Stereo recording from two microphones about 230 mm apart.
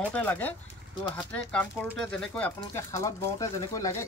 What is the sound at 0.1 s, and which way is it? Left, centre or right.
Speech, centre.